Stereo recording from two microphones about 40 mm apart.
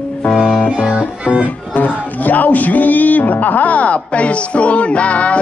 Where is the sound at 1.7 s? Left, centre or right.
Left.